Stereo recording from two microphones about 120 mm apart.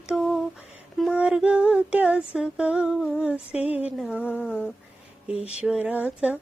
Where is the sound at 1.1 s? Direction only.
10° right (ahead or behind).